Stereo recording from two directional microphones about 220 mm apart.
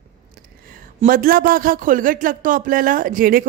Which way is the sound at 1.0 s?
40° right (ahead or behind).